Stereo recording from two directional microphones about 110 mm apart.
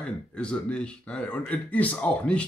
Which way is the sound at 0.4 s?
10° left (ahead or behind).